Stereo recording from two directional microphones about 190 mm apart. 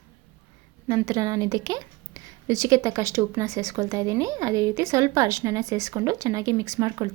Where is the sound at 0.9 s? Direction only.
20° right (ahead or behind).